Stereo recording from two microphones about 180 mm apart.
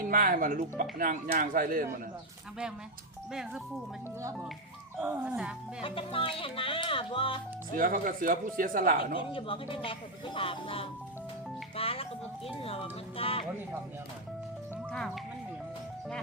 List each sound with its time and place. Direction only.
0.1 s speech: 50° right (ahead or behind)
5.0 s speech: 5° right (ahead or behind)
5.8 s speech: 30° left (ahead or behind)
7.8 s speech: 50° right (ahead or behind)
9.1 s speech: 30° left (ahead or behind)
14.9 s speech: centre (ahead or behind)